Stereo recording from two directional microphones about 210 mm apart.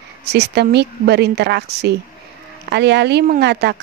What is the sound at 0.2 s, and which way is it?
Speech, 55° right (ahead or behind).